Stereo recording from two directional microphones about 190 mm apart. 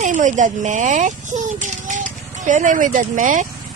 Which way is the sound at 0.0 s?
40° right (ahead or behind).